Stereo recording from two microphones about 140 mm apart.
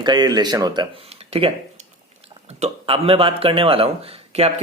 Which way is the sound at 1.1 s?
45° right (ahead or behind).